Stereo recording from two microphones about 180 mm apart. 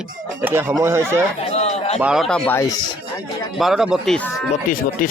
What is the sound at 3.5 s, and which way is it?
Speech, centre (ahead or behind).